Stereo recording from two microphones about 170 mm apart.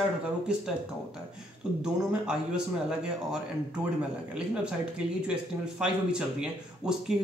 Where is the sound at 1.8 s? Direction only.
5° right (ahead or behind).